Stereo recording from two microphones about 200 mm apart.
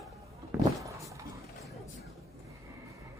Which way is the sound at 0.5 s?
15° right (ahead or behind).